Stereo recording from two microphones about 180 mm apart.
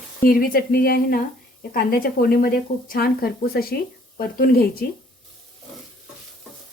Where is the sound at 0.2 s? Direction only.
55° left (ahead or behind).